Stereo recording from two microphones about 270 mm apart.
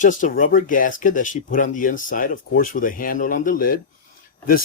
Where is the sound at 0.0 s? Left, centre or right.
Left.